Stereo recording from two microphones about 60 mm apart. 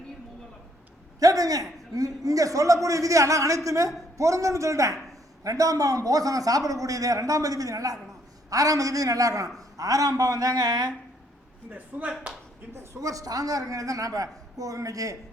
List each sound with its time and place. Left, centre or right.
1.2 s a man's voice: right
5.4 s a man's voice: right
11.7 s speech: right
12.7 s a man's voice: right